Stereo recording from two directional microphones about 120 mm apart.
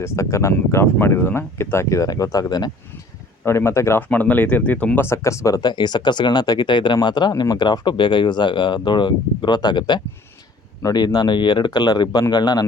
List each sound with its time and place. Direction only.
0.0 s speech: 25° left (ahead or behind)
3.4 s speech: 20° left (ahead or behind)